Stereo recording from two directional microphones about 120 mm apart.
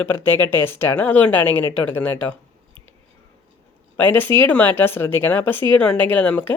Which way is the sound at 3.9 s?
15° left (ahead or behind).